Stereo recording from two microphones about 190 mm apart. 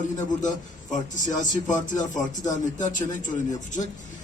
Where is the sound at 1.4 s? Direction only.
40° left (ahead or behind).